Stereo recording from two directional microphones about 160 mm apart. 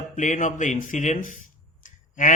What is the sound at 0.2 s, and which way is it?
Speech, 50° left (ahead or behind).